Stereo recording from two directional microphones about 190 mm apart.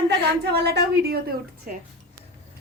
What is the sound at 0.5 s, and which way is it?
Speech, 60° right (ahead or behind).